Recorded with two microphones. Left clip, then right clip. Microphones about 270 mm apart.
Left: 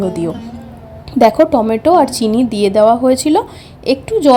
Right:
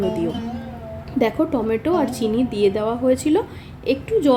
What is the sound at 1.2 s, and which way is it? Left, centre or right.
A woman's voice, left.